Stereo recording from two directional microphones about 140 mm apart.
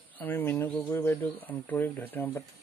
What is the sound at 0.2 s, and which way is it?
Speech, 15° left (ahead or behind).